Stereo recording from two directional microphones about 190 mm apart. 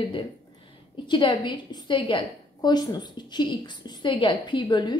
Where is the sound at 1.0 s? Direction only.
25° left (ahead or behind).